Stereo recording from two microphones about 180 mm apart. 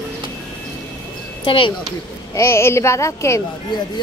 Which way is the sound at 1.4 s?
30° left (ahead or behind).